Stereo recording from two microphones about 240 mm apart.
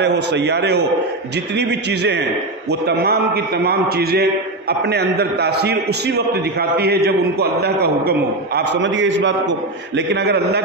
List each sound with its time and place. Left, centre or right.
0.0 s a man's voice: right